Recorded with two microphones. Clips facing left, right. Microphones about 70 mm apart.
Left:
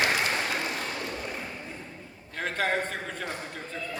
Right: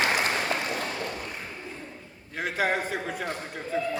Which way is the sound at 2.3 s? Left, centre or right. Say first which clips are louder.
Right 1 dB; centre.